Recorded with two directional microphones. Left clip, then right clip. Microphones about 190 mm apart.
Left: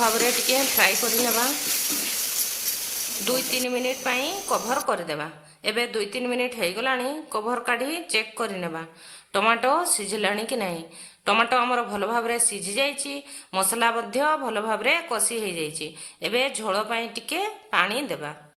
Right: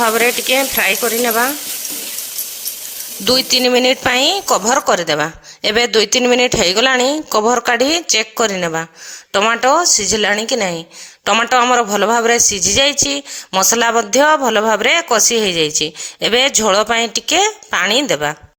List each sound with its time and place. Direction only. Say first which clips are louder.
0.0 s speech: right 8 dB; 35° right (ahead or behind)
3.2 s a man's voice: right 13 dB; 50° right (ahead or behind)